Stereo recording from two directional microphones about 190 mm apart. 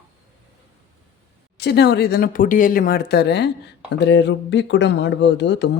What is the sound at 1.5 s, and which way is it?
Speech, 60° left (ahead or behind).